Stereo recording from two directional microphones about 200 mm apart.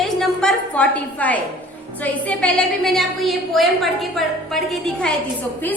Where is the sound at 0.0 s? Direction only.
Centre (ahead or behind).